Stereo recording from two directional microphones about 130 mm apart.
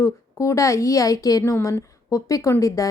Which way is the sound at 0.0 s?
25° left (ahead or behind).